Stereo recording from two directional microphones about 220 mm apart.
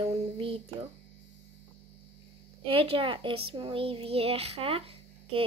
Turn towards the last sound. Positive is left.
turn(degrees=-25)  # may be behind; listen again after turning